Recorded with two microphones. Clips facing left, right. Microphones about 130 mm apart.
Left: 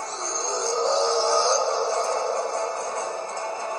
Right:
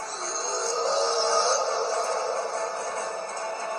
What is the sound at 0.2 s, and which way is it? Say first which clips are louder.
Music: left 2 dB; 30° left (ahead or behind).